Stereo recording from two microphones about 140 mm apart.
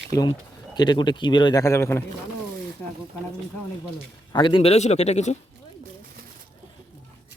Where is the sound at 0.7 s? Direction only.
30° left (ahead or behind).